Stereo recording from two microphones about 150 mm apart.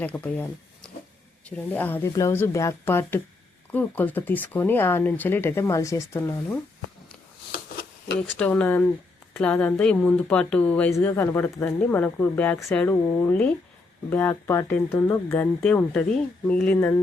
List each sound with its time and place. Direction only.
0.0 s speech: 10° left (ahead or behind)
7.5 s a sound: 90° left
8.4 s speech: 10° left (ahead or behind)